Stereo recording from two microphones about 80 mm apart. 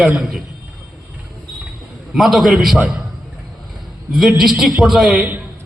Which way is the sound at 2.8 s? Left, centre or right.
Right.